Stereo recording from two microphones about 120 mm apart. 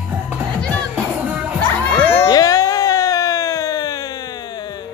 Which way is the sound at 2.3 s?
30° left (ahead or behind).